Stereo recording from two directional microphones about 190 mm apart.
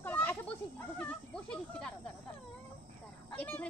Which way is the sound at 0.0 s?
10° left (ahead or behind).